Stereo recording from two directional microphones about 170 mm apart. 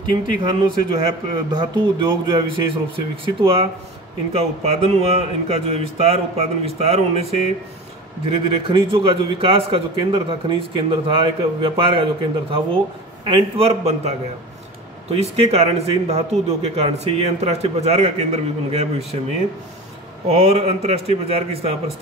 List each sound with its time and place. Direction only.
0.4 s a man's voice: 25° right (ahead or behind)
20.2 s a man's voice: 35° right (ahead or behind)